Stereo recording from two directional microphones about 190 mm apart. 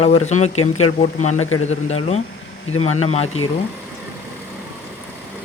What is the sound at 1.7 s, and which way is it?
Speech, 35° left (ahead or behind).